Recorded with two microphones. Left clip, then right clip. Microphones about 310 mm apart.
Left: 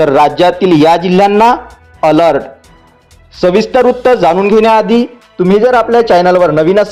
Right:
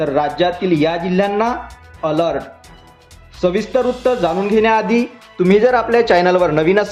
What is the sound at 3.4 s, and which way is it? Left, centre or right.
A man's voice, left.